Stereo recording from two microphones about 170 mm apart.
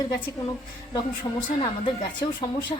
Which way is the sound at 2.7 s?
30° left (ahead or behind).